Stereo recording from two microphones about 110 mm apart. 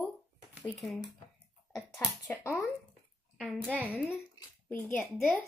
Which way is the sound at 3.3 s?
5° left (ahead or behind).